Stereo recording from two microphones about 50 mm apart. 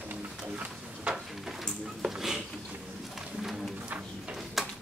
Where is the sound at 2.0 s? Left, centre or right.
Centre.